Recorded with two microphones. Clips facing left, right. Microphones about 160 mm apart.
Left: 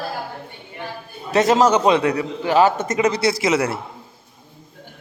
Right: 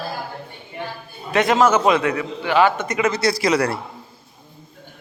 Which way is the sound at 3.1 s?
25° left (ahead or behind).